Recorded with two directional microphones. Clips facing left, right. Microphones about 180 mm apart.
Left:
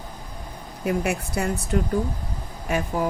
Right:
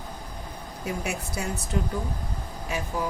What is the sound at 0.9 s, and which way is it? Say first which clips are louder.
Speech: left 7 dB; 60° left (ahead or behind).